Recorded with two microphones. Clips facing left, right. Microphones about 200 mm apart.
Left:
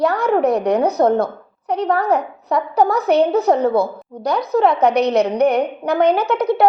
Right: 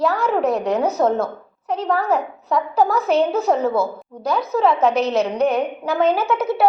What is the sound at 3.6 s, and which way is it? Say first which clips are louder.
A woman's voice: left 3 dB; 15° left (ahead or behind).